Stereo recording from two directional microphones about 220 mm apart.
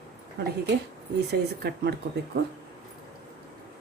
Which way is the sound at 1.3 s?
50° right (ahead or behind).